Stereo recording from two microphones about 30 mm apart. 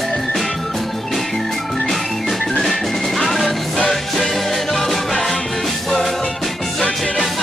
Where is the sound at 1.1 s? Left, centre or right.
Centre.